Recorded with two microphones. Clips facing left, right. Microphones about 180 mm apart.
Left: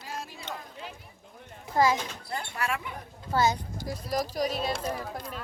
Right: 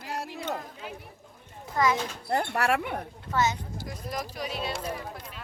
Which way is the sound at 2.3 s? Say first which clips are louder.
Right 7 dB; 65° right (ahead or behind).